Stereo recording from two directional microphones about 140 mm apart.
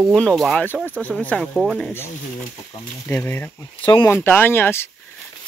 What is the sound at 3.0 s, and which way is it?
Speech, 15° left (ahead or behind).